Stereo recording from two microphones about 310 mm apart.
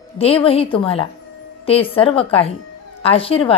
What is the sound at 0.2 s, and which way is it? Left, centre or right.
A woman's voice, centre.